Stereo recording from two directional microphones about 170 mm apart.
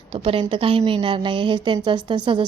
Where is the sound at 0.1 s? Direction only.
30° right (ahead or behind).